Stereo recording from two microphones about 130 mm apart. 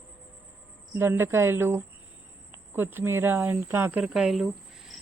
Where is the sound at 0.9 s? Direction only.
20° right (ahead or behind).